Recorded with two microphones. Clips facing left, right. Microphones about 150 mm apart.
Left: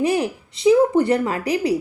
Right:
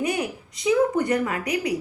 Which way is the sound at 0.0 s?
30° left (ahead or behind).